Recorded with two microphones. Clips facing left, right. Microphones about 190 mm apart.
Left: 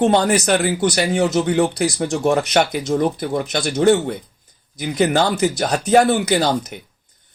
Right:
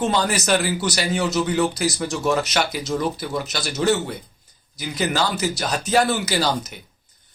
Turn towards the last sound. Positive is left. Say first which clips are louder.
# left 5 dB
turn(degrees=55)  # may be behind; listen again after turning